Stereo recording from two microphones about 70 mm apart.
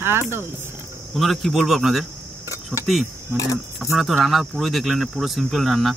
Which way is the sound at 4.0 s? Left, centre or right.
Centre.